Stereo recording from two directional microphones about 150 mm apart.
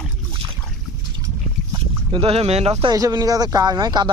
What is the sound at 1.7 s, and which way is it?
Speech, 35° right (ahead or behind).